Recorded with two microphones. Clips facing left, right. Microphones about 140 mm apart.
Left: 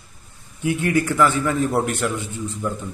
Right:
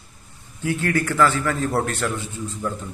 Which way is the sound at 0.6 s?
15° left (ahead or behind).